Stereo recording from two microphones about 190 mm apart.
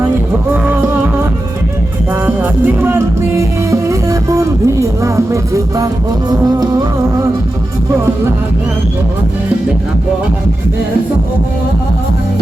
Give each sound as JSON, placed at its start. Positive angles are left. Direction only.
{"t": 0.5, "sound": "music", "side_deg": -10}
{"t": 2.2, "sound": "music", "side_deg": -10}